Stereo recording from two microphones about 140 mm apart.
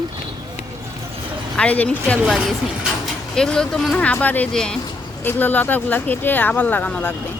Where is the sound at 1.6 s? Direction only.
10° left (ahead or behind).